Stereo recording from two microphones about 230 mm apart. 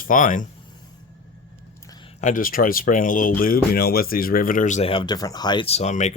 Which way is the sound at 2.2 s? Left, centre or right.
Left.